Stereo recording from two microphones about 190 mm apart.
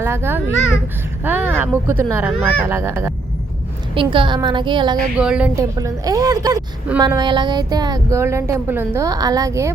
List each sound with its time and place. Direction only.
0.0 s speech: 15° right (ahead or behind)
3.9 s a woman's voice: 25° right (ahead or behind)
5.1 s a woman's voice: 5° right (ahead or behind)
5.5 s a woman's voice: 15° right (ahead or behind)